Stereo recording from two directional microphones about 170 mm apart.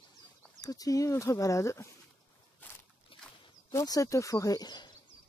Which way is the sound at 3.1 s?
30° left (ahead or behind).